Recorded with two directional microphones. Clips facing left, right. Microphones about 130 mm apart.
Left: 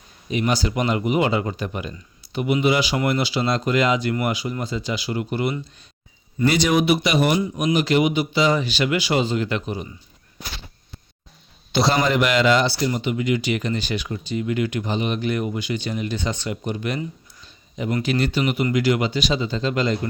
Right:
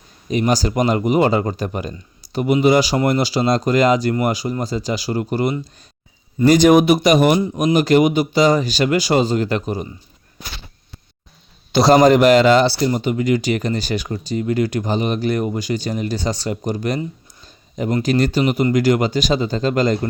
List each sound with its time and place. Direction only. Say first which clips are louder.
0.3 s a man's voice: right 4 dB; 40° right (ahead or behind)
11.7 s a man's voice: right 8 dB; 40° right (ahead or behind)